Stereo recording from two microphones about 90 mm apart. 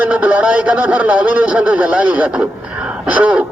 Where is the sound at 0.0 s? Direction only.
20° right (ahead or behind).